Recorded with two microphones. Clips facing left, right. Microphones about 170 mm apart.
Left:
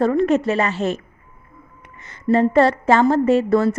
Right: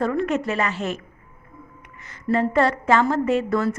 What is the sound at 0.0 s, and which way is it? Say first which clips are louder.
A woman's voice: left 6 dB; 30° left (ahead or behind).